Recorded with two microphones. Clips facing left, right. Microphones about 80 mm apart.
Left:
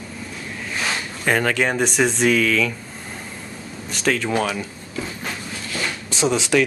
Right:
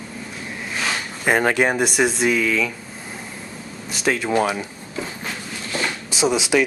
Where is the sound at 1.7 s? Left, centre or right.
Centre.